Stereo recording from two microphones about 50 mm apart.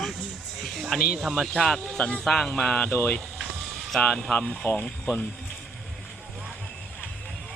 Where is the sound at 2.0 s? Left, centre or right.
Left.